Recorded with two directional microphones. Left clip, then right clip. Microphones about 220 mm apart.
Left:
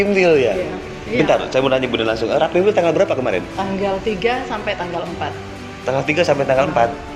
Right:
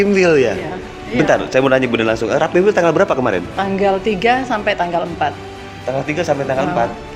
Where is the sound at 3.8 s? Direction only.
50° right (ahead or behind).